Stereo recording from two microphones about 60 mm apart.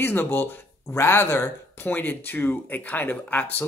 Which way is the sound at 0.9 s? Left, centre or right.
Left.